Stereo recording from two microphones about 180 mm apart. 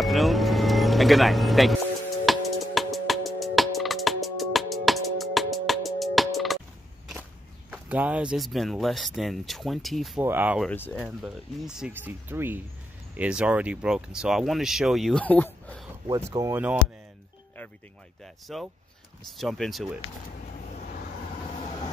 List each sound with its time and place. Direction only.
0.0 s music: centre (ahead or behind)
7.7 s speech: 5° right (ahead or behind)
10.7 s speech: 10° left (ahead or behind)
11.0 s speech: 5° right (ahead or behind)
16.1 s speech: 15° right (ahead or behind)
18.2 s speech: centre (ahead or behind)